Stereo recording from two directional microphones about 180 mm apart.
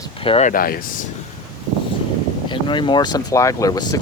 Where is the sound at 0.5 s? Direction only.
55° left (ahead or behind).